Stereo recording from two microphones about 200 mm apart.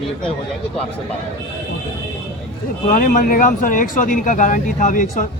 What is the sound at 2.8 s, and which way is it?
Speech, 40° left (ahead or behind).